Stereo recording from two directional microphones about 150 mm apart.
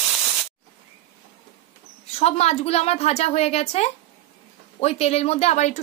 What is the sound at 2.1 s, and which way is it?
Speech, 45° left (ahead or behind).